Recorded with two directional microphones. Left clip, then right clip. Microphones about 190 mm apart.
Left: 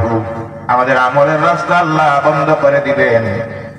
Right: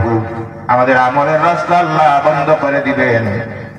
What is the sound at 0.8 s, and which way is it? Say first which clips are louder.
A man's voice: left 1 dB; 20° left (ahead or behind).